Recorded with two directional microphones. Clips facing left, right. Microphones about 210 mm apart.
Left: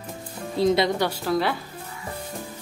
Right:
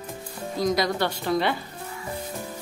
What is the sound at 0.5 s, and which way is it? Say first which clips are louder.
Speech: left 4 dB; 25° left (ahead or behind).